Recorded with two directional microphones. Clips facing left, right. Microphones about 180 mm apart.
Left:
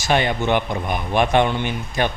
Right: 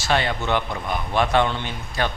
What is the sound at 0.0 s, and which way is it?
Speech, 15° left (ahead or behind).